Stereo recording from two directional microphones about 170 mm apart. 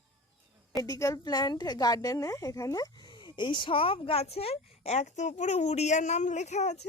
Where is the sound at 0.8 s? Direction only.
20° left (ahead or behind).